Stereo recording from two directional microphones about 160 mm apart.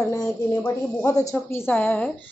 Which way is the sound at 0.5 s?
15° left (ahead or behind).